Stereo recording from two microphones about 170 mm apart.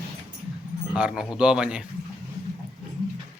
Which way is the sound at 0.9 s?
5° right (ahead or behind).